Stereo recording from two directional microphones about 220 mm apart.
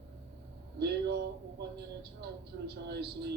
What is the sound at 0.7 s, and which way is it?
Speech, 50° right (ahead or behind).